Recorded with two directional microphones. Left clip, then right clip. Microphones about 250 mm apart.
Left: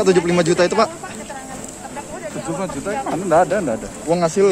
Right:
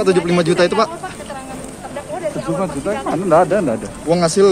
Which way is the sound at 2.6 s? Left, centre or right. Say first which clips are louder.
Right 1 dB; centre.